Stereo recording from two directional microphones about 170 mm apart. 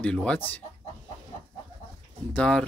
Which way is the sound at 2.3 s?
5° left (ahead or behind).